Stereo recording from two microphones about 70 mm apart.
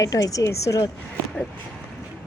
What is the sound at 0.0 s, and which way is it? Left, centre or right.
Speech, left.